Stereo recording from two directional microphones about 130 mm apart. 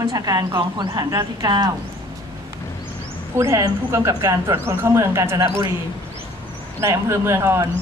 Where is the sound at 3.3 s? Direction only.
20° right (ahead or behind).